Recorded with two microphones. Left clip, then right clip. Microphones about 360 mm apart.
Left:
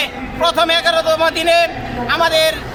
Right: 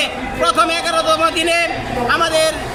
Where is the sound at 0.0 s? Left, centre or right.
Left.